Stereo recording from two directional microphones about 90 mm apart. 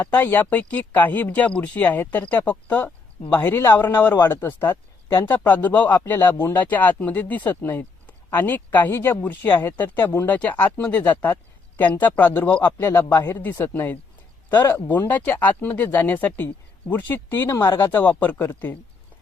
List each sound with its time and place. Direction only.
0.0 s speech: 20° left (ahead or behind)
17.9 s speech: 20° left (ahead or behind)